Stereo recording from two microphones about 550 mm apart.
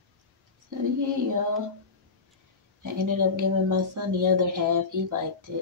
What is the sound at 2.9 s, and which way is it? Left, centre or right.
Speech, right.